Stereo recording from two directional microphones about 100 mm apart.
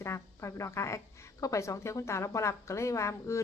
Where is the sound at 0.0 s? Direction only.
30° left (ahead or behind).